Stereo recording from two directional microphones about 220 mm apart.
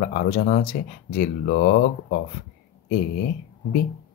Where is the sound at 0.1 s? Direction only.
40° left (ahead or behind).